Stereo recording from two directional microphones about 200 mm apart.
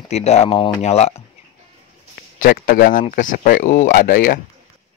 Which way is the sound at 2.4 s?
45° left (ahead or behind).